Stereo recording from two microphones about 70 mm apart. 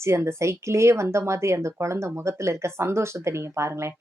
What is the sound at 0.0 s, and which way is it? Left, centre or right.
Speech, right.